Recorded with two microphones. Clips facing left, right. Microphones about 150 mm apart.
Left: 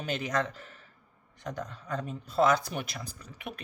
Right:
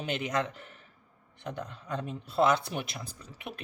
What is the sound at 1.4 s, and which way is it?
Speech, 25° right (ahead or behind).